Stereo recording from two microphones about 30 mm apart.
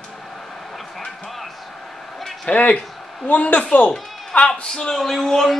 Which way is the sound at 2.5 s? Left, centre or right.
Left.